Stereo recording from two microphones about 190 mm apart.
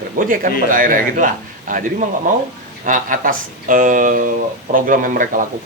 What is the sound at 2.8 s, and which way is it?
Speech, 45° right (ahead or behind).